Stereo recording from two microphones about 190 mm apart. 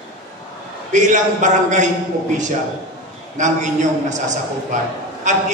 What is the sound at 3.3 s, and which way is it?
A man's voice, 40° right (ahead or behind).